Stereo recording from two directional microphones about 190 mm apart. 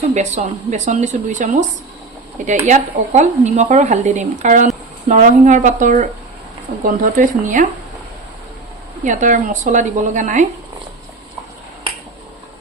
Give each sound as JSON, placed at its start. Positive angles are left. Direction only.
{"t": 0.1, "sound": "speech", "side_deg": -35}
{"t": 2.6, "sound": "speech", "side_deg": -40}
{"t": 9.0, "sound": "speech", "side_deg": -40}